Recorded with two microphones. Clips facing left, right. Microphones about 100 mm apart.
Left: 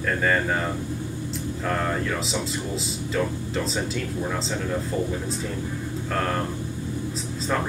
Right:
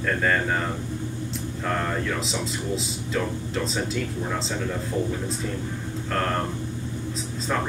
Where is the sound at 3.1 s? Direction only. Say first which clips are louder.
Left 1 dB; centre (ahead or behind).